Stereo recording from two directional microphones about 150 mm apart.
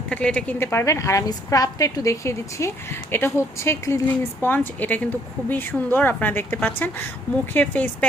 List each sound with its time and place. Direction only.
0.1 s a woman's voice: 5° left (ahead or behind)